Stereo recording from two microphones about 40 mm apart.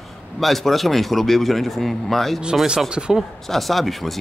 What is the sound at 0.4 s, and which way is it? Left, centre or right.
Speech, centre.